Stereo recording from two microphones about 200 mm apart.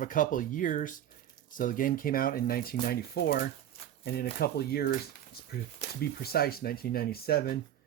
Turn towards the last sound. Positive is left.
turn(degrees=50)  # may be behind; listen again after turning